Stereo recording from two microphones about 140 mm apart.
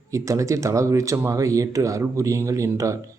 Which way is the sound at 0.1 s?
20° right (ahead or behind).